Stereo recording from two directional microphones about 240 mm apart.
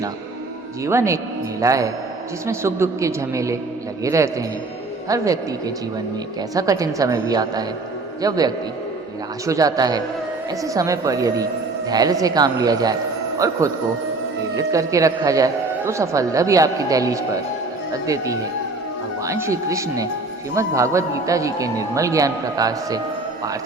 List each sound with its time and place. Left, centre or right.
0.9 s a woman's voice: centre